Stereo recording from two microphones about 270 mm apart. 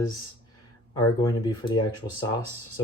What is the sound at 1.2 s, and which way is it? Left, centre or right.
Speech, centre.